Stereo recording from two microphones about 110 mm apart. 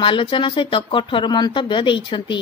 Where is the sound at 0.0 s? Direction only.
50° left (ahead or behind).